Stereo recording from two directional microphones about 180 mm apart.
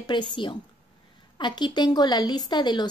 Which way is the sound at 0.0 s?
25° left (ahead or behind).